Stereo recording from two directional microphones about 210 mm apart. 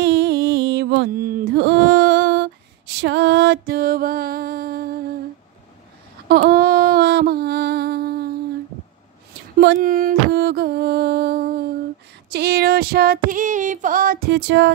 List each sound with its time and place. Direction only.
0.0 s music: 55° right (ahead or behind)
1.2 s a sound: 50° right (ahead or behind)
3.0 s music: 55° right (ahead or behind)
6.2 s a sound: 50° right (ahead or behind)
9.8 s music: 40° right (ahead or behind)
12.3 s female singing: 45° right (ahead or behind)